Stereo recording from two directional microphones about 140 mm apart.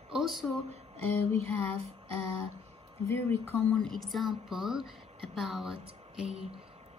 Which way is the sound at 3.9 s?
Centre (ahead or behind).